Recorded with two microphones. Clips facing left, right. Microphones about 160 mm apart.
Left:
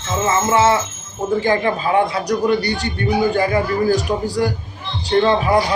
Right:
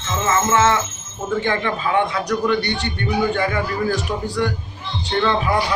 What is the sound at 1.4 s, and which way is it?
Speech, 35° left (ahead or behind).